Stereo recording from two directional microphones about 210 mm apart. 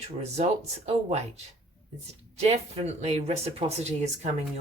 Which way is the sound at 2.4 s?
30° right (ahead or behind).